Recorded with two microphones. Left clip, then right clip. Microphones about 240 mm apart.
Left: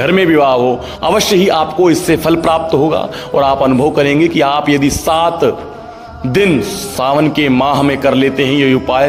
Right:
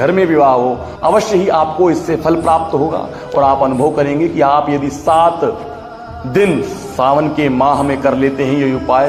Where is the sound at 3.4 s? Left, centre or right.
Left.